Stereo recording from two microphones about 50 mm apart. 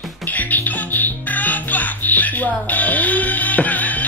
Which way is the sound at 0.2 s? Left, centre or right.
Left.